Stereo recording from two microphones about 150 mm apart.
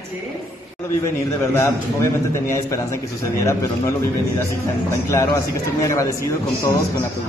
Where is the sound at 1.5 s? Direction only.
20° left (ahead or behind).